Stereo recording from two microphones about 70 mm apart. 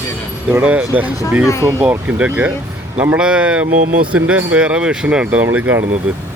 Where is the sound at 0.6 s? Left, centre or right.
Centre.